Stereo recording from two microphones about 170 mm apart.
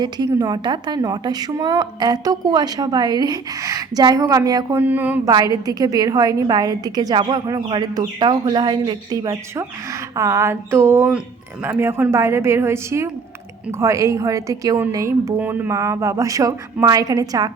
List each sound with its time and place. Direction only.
0.0 s a woman's voice: 25° right (ahead or behind)
5.3 s a woman's voice: 20° right (ahead or behind)